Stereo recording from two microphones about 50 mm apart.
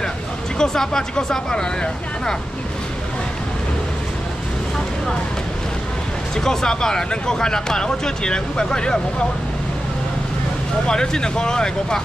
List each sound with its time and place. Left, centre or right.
0.6 s speech: centre
6.4 s speech: centre
10.9 s speech: centre